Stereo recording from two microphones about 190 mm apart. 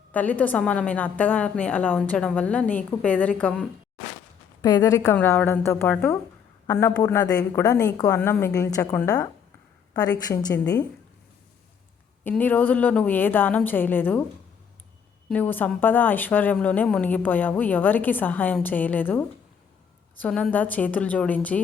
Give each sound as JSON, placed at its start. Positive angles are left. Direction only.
{"t": 0.1, "sound": "a woman's voice", "side_deg": 10}
{"t": 4.6, "sound": "a woman's voice", "side_deg": 20}
{"t": 12.2, "sound": "a woman's voice", "side_deg": 10}
{"t": 15.3, "sound": "a woman's voice", "side_deg": 10}